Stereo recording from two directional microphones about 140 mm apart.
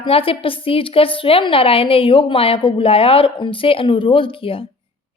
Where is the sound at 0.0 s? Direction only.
40° left (ahead or behind).